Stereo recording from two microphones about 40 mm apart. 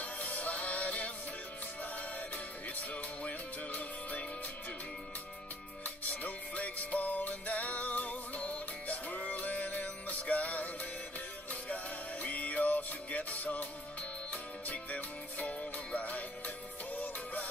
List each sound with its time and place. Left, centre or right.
0.0 s music: left
5.9 s music: left